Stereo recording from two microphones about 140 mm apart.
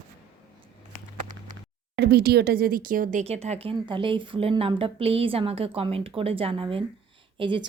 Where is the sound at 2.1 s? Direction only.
90° right; by 3.2 s 70° right (ahead or behind).